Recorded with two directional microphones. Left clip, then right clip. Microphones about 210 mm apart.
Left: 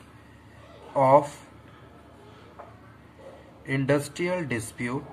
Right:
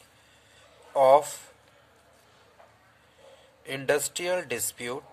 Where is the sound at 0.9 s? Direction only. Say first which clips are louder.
Even; 45° right (ahead or behind).